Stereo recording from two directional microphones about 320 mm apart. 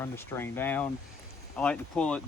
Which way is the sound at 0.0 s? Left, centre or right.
Centre.